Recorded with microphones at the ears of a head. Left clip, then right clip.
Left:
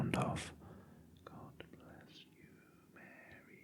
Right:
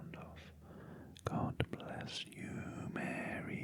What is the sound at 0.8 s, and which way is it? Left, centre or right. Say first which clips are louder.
Whispering: right 12 dB; right.